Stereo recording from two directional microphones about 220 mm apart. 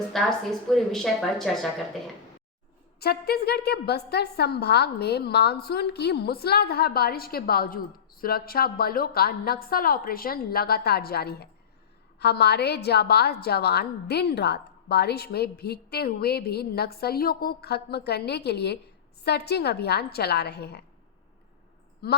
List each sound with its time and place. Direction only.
0.1 s speech: centre (ahead or behind)
3.0 s a woman's voice: 45° left (ahead or behind)